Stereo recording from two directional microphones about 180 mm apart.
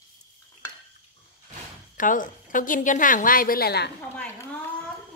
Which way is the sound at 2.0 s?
45° left (ahead or behind).